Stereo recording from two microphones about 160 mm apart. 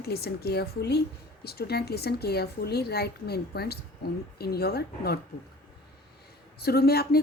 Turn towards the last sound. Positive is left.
turn(degrees=80)